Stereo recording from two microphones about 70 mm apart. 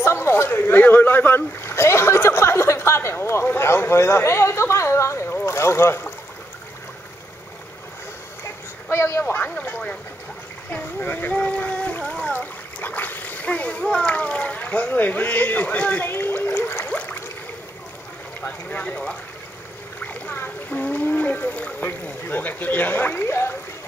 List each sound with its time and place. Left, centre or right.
0.0 s splash: left
3.4 s a sound: left
8.8 s speech: left
9.3 s speech: left
12.0 s splash: centre
12.3 s splash: left
13.8 s speech: centre; by 16.9 s left
16.9 s a sound: left
18.4 s speech: left